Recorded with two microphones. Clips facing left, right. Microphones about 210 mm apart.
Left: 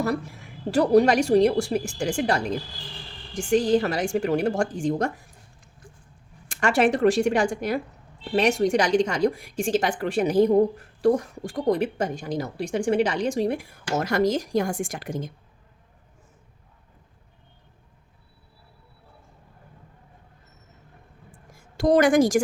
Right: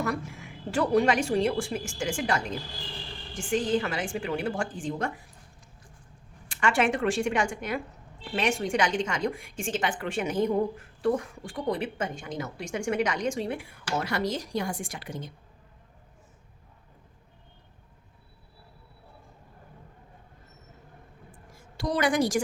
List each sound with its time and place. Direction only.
0.7 s a woman's voice: 40° left (ahead or behind)
6.5 s a woman's voice: 40° left (ahead or behind)
21.8 s a woman's voice: 45° left (ahead or behind)